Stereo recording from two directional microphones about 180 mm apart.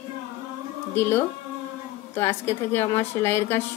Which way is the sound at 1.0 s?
15° left (ahead or behind).